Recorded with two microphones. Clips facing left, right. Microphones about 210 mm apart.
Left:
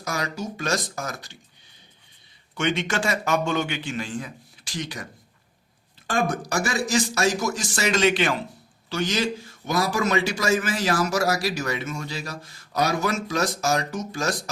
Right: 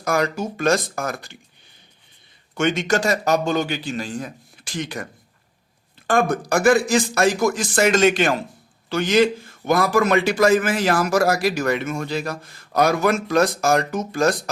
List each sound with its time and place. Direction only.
0.0 s a man's voice: 55° right (ahead or behind)
2.6 s a man's voice: 45° right (ahead or behind)
6.1 s a man's voice: 55° right (ahead or behind)